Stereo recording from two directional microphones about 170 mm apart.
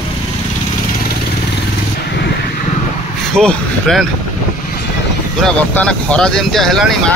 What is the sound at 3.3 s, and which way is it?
Speech, centre (ahead or behind).